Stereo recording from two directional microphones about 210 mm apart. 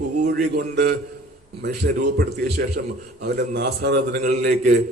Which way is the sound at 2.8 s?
55° right (ahead or behind).